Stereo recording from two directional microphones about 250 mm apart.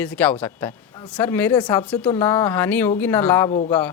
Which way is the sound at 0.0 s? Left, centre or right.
Centre.